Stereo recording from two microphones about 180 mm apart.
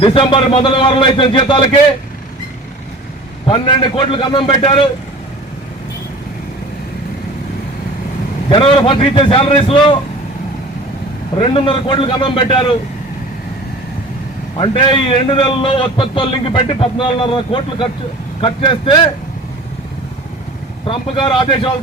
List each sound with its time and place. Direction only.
0.0 s a man's voice: 30° left (ahead or behind)
3.4 s a man's voice: 30° left (ahead or behind)
8.4 s a man's voice: 30° left (ahead or behind)
11.3 s a man's voice: 30° left (ahead or behind)
14.6 s a man's voice: 30° left (ahead or behind)
20.8 s a man's voice: 30° left (ahead or behind)